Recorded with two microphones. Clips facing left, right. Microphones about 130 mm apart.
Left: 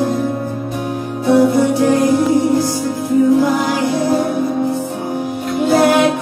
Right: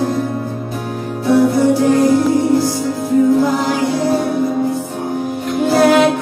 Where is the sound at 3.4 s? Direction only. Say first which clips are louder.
Even; centre (ahead or behind).